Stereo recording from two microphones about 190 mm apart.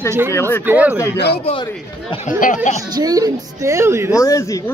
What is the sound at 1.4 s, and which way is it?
Speech, 30° left (ahead or behind).